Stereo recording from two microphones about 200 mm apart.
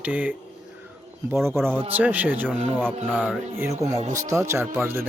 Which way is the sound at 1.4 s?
10° right (ahead or behind).